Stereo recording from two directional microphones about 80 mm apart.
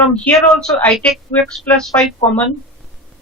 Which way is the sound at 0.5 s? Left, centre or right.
Centre.